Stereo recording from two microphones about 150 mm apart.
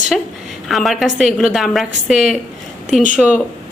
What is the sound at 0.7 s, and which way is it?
A woman's voice, centre (ahead or behind).